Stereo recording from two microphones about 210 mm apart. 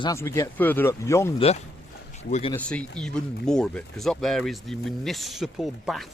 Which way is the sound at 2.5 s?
5° left (ahead or behind).